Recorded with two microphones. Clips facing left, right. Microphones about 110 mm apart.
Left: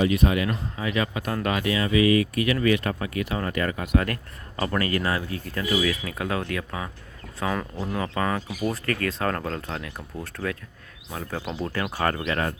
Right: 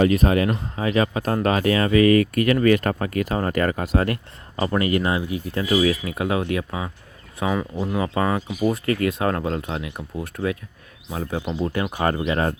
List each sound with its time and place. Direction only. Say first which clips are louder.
0.0 s speech: right 4 dB; 40° right (ahead or behind); by 5.6 s 20° right (ahead or behind)
5.6 s speech: right 5 dB; 35° right (ahead or behind); by 12.5 s 20° right (ahead or behind)